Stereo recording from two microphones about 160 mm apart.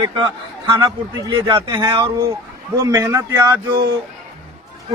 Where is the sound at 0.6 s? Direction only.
25° right (ahead or behind).